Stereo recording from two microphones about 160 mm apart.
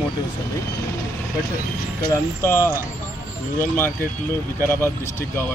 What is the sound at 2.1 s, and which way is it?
A man's voice, 15° left (ahead or behind).